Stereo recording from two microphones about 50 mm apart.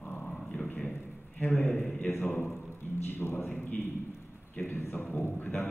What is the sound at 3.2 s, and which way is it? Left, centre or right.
Speech, left.